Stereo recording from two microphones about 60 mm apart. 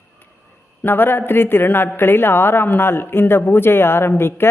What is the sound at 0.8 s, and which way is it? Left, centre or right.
A woman's voice, left.